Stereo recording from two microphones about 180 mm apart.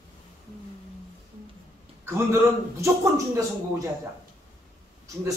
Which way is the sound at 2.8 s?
15° right (ahead or behind).